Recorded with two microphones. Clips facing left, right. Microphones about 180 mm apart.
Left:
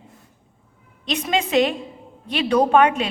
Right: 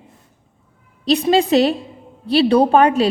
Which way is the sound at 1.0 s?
35° right (ahead or behind).